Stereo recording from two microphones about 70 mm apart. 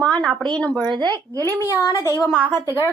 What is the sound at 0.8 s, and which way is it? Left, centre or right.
Speech, right.